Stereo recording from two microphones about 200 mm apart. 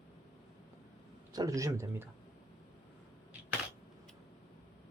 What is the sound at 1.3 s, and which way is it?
Speech, 20° right (ahead or behind).